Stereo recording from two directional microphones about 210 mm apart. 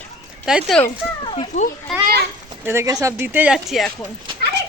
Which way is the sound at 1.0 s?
5° right (ahead or behind).